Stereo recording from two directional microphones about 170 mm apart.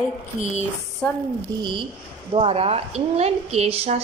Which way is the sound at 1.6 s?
30° right (ahead or behind).